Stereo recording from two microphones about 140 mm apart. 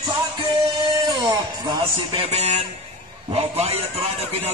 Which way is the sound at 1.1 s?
30° right (ahead or behind).